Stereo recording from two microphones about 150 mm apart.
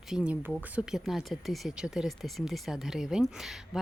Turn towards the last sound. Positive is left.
turn(degrees=-5)  # may be behind; listen again after turning